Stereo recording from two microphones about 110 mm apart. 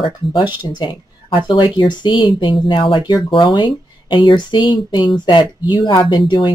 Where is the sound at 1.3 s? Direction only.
50° left (ahead or behind).